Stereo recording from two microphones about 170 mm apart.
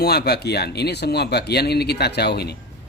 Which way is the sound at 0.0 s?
70° left (ahead or behind).